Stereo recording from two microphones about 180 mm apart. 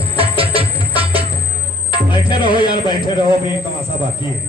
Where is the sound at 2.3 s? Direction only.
25° left (ahead or behind).